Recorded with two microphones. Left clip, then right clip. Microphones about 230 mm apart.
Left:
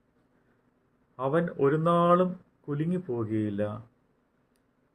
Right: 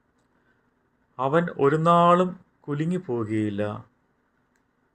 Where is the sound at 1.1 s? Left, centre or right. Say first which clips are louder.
Right 5 dB; right.